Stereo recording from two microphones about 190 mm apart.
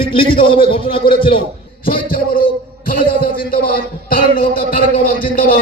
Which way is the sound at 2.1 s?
50° left (ahead or behind).